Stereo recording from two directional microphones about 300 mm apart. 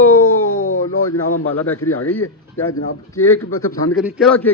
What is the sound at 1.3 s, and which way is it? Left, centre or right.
Speech, left.